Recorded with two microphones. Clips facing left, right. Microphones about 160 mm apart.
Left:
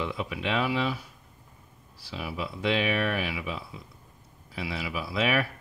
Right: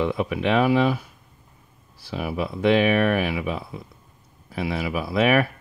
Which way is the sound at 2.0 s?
55° right (ahead or behind).